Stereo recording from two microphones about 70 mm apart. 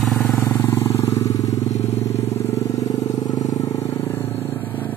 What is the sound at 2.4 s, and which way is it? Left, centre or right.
Vehicle, left.